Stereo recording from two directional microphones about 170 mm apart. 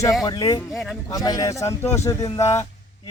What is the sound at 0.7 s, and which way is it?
Speech, centre (ahead or behind).